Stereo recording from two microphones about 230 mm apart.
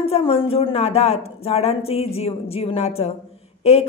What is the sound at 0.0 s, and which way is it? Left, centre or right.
Speech, left.